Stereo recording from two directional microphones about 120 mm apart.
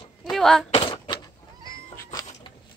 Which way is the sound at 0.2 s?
5° left (ahead or behind).